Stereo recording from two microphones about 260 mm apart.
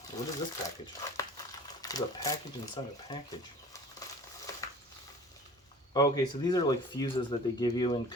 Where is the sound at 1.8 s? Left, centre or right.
Centre.